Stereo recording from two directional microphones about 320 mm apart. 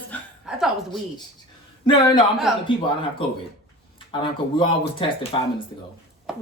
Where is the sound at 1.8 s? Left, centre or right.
Centre.